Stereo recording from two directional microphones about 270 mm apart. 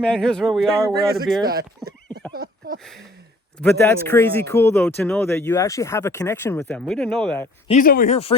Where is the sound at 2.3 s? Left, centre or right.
Right.